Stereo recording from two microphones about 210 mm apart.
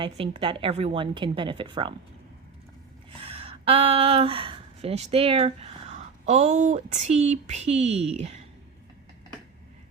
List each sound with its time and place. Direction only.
0.0 s a woman's voice: 25° right (ahead or behind)
3.2 s speech: 25° right (ahead or behind)